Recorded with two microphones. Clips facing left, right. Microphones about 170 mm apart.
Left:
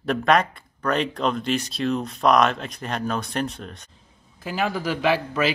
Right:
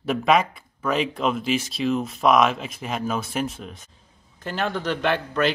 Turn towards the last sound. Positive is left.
turn(degrees=5)  # may be behind; listen again after turning